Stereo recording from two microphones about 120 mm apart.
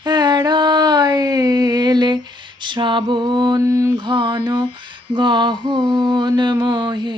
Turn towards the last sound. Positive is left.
turn(degrees=-40)  # may be behind; listen again after turning